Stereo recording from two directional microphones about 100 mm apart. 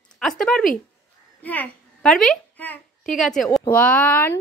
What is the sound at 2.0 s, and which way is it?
Speech, 5° left (ahead or behind).